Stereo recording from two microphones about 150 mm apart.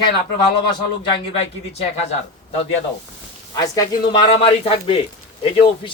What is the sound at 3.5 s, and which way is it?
A man's voice, 25° left (ahead or behind).